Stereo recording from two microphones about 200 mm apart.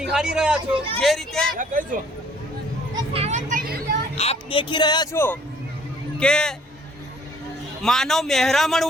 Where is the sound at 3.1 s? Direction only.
35° right (ahead or behind).